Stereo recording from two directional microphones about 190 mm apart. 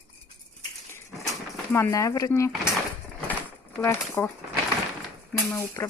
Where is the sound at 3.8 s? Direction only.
10° left (ahead or behind).